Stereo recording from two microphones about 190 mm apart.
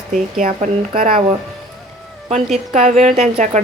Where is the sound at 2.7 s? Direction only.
35° right (ahead or behind).